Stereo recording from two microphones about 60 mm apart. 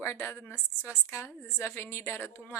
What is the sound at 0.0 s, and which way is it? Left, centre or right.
A woman's voice, left.